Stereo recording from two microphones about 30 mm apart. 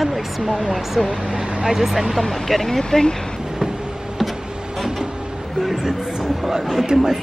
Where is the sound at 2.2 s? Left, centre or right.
Centre.